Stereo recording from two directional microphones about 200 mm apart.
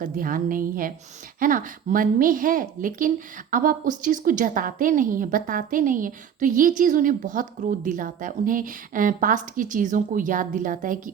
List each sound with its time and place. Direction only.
0.0 s a woman's voice: 45° right (ahead or behind)